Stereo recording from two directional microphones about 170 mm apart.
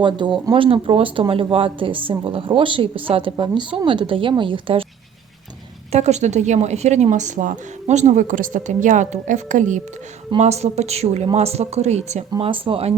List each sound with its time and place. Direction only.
0.0 s speech: 25° right (ahead or behind)
5.9 s a woman's voice: 40° right (ahead or behind)
12.3 s speech: 30° right (ahead or behind)